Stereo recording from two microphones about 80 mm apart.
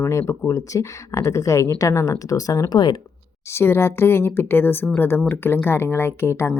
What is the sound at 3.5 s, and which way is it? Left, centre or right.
Speech, left.